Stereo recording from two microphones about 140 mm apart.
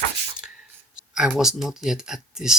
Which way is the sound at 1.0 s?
5° right (ahead or behind).